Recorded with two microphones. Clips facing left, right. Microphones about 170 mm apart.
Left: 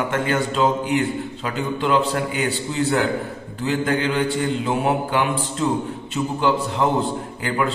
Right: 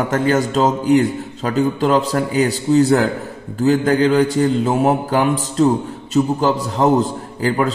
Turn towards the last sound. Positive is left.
turn(degrees=-40)  # may be behind; listen again after turning